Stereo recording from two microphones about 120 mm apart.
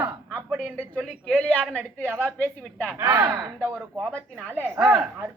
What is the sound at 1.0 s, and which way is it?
A man's voice, 10° left (ahead or behind).